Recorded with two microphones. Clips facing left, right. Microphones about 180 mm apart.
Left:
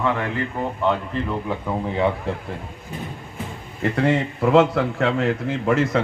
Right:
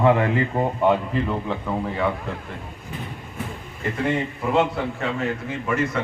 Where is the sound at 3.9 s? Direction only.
70° left (ahead or behind).